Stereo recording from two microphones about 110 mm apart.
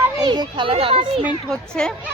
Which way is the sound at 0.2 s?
40° right (ahead or behind).